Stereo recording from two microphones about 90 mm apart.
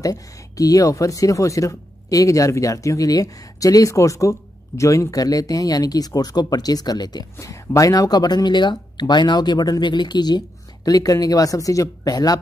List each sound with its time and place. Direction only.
0.0 s speech: 40° left (ahead or behind)
7.3 s speech: 35° left (ahead or behind); by 10.4 s 55° left (ahead or behind)
10.9 s speech: 40° left (ahead or behind)